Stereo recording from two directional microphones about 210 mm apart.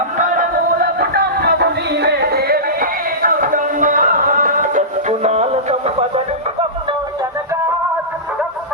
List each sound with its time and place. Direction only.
0.2 s music: 40° right (ahead or behind)